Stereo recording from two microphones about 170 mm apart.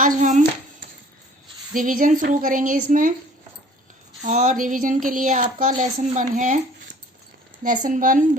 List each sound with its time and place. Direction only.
0.0 s a sound: 50° right (ahead or behind)
1.7 s speech: 55° right (ahead or behind)
4.2 s speech: 45° right (ahead or behind)
7.6 s speech: 50° right (ahead or behind)